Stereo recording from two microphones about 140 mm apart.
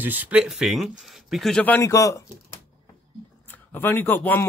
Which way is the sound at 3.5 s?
15° left (ahead or behind).